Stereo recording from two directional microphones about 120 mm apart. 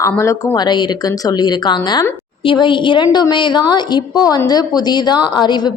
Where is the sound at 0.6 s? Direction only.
35° left (ahead or behind).